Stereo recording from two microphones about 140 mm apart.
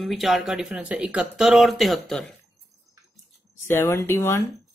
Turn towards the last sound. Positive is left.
turn(degrees=15)  # may be behind; listen again after turning